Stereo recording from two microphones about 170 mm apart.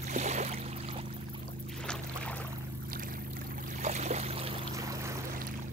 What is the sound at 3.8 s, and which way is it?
Boat, 40° right (ahead or behind).